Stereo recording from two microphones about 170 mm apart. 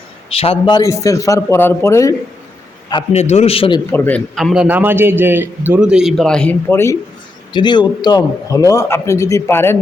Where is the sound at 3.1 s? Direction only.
40° left (ahead or behind).